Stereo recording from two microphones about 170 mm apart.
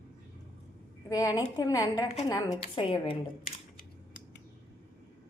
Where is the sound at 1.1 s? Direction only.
20° left (ahead or behind).